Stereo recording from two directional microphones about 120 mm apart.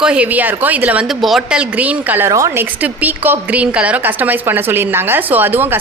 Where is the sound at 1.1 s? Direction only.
Centre (ahead or behind).